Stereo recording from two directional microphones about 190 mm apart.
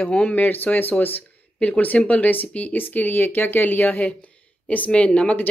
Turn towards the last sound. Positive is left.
turn(degrees=5)  # may be behind; listen again after turning